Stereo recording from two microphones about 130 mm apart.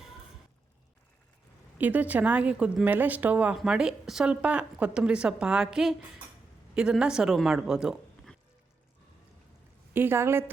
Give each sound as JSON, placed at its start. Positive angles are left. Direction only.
{"t": 1.8, "sound": "speech", "side_deg": -10}
{"t": 9.9, "sound": "speech", "side_deg": -15}